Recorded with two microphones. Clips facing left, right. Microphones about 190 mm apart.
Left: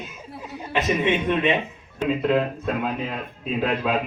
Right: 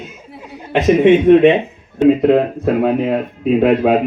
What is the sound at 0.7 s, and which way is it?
Speech, 60° right (ahead or behind).